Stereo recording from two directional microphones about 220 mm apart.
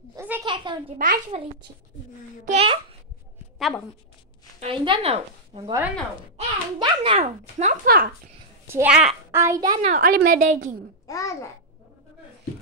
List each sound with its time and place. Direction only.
0.1 s a woman's voice: 10° right (ahead or behind)
0.9 s a child's voice: 40° right (ahead or behind)
2.4 s a woman's voice: 25° right (ahead or behind)
3.5 s a woman's voice: centre (ahead or behind)
4.6 s a woman's voice: 25° right (ahead or behind); by 8.1 s 40° right (ahead or behind)
8.6 s a child's voice: 10° right (ahead or behind)
9.8 s a child's voice: 35° right (ahead or behind)
11.1 s a child's voice: 15° left (ahead or behind)